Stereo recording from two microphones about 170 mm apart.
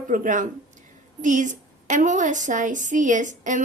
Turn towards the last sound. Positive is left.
turn(degrees=-50)  # may be behind; listen again after turning